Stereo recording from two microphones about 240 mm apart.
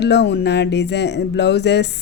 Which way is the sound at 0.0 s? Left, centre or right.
Left.